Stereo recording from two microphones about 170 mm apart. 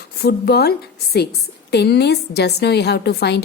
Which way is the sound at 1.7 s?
80° left.